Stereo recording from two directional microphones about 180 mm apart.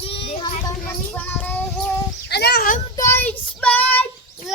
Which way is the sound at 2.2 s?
65° left (ahead or behind).